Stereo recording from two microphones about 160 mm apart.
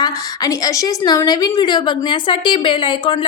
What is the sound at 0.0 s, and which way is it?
A woman's voice, 20° left (ahead or behind).